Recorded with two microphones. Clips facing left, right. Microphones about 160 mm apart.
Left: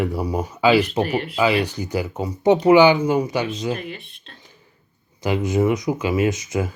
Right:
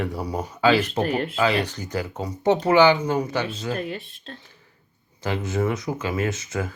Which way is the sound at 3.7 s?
40° right (ahead or behind).